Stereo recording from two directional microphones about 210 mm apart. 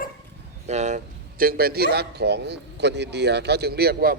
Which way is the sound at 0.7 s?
35° right (ahead or behind).